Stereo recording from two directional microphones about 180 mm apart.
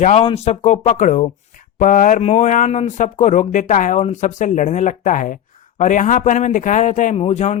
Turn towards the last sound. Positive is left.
turn(degrees=40)  # may be behind; listen again after turning